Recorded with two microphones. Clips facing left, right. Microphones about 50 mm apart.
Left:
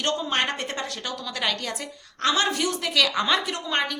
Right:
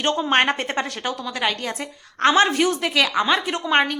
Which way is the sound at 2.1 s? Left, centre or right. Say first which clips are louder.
Right 7 dB; right.